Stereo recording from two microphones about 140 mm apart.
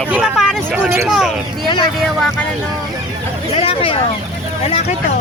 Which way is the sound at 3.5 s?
45° left (ahead or behind).